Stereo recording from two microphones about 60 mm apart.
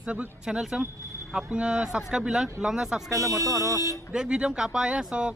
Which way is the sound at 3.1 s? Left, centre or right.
Right.